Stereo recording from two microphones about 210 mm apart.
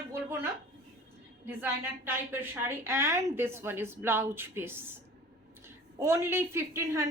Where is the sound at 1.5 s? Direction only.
10° right (ahead or behind).